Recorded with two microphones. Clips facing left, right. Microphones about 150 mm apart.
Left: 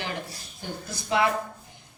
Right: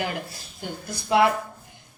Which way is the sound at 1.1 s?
60° right (ahead or behind).